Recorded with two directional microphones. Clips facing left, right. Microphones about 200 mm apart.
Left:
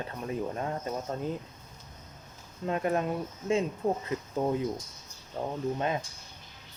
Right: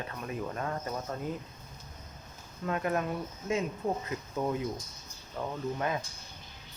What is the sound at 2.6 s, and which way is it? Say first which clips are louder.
Speech: left 2 dB; 25° left (ahead or behind).